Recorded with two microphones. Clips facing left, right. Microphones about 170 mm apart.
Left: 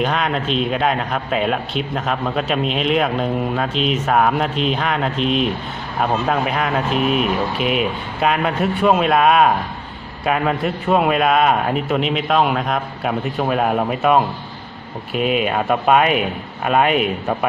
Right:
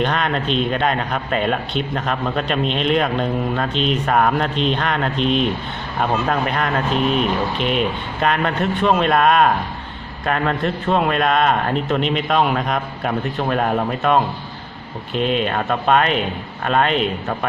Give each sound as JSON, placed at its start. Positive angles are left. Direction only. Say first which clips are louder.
{"t": 0.0, "sound": "a man's voice", "louder": "even", "side_deg": 0}